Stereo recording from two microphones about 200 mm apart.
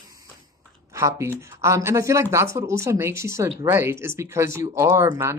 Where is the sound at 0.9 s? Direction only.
15° right (ahead or behind).